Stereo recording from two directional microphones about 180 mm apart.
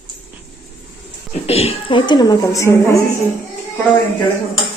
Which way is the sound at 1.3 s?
35° left (ahead or behind).